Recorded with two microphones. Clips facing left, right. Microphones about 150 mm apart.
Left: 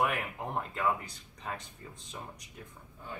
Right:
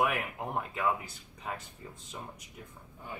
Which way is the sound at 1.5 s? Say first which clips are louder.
Right 1 dB; 5° right (ahead or behind).